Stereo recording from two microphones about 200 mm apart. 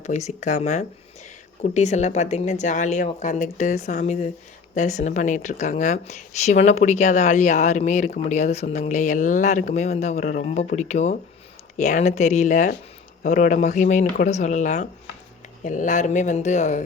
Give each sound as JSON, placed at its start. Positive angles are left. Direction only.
{"t": 0.0, "sound": "speech", "side_deg": 35}